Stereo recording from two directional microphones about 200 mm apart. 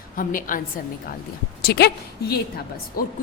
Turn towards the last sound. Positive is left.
turn(degrees=45)  # may be behind; listen again after turning